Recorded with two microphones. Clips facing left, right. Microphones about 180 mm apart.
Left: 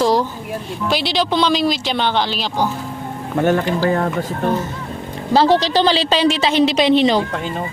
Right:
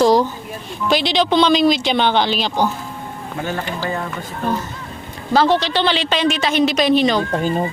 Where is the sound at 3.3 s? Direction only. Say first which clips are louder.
Left 9 dB; 55° left (ahead or behind).